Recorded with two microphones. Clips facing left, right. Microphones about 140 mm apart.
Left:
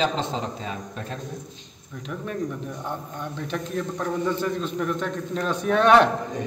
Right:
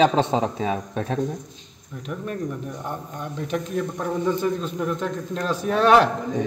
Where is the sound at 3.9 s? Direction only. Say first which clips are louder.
Right 1 dB; 10° right (ahead or behind).